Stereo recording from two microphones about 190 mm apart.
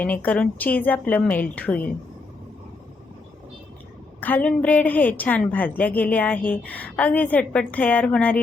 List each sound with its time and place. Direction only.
0.0 s a woman's voice: 10° left (ahead or behind)
4.2 s a woman's voice: 10° left (ahead or behind)